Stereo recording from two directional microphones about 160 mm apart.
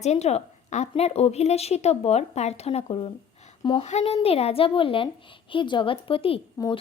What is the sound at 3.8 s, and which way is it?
Speech, 40° left (ahead or behind).